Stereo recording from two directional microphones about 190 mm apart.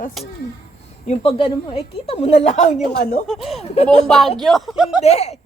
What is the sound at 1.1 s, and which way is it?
A woman's voice, 30° left (ahead or behind).